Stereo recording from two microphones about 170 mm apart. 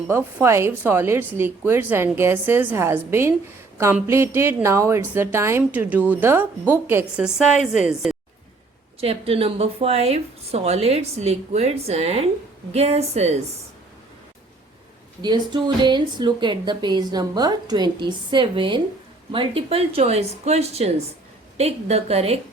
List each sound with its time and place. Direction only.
0.1 s a woman's voice: 15° right (ahead or behind)
9.0 s speech: 35° right (ahead or behind)
15.2 s speech: 25° right (ahead or behind)